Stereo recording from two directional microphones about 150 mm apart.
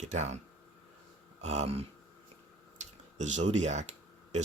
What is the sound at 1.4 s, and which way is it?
Speech, 45° right (ahead or behind).